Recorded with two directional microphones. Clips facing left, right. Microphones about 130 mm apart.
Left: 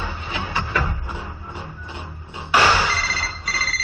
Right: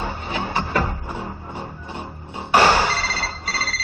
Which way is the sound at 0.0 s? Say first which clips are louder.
Right 3 dB; 40° right (ahead or behind).